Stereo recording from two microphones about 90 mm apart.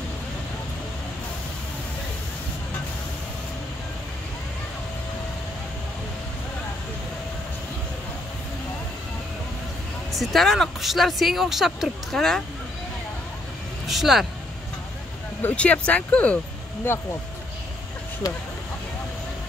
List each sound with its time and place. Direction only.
10.1 s speech: centre (ahead or behind)
13.8 s speech: centre (ahead or behind)
15.4 s speech: 15° left (ahead or behind)
18.2 s speech: 40° left (ahead or behind)